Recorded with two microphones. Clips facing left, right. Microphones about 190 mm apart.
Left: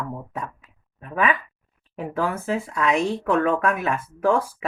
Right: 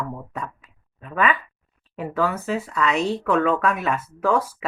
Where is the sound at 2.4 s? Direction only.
10° left (ahead or behind).